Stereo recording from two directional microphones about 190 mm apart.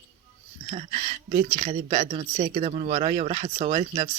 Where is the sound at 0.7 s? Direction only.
35° right (ahead or behind).